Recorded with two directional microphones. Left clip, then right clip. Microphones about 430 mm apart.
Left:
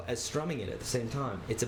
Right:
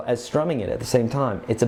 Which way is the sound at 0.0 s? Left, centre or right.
Right.